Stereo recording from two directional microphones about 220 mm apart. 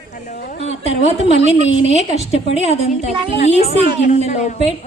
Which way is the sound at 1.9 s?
30° left (ahead or behind).